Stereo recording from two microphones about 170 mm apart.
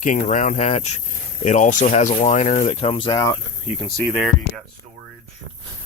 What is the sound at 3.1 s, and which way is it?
Speech, 20° left (ahead or behind).